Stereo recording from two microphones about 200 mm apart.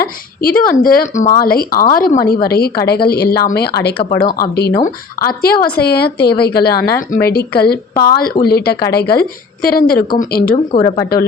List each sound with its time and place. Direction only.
0.0 s speech: 45° left (ahead or behind)
10.7 s speech: 20° left (ahead or behind)